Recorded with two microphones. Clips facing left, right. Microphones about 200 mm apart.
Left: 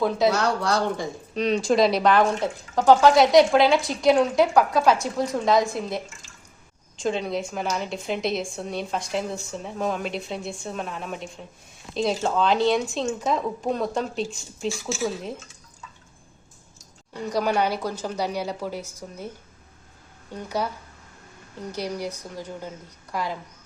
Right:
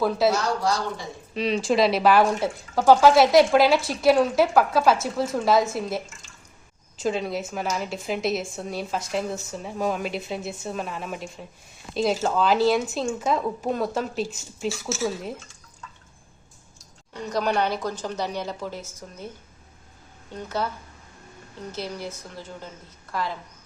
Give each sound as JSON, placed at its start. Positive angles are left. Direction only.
{"t": 0.3, "sound": "speech", "side_deg": 60}
{"t": 1.3, "sound": "a woman's voice", "side_deg": 0}
{"t": 17.2, "sound": "a woman's voice", "side_deg": 10}
{"t": 20.3, "sound": "a woman's voice", "side_deg": 10}